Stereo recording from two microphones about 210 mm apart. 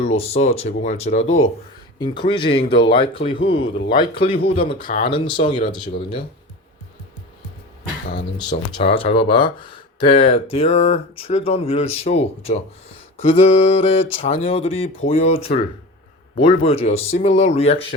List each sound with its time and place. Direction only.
0.2 s speech: 30° left (ahead or behind)
8.1 s speech: 25° left (ahead or behind)